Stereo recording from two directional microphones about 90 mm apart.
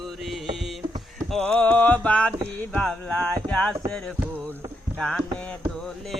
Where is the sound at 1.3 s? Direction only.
10° left (ahead or behind).